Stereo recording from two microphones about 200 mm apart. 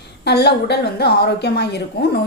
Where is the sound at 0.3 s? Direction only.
55° left (ahead or behind).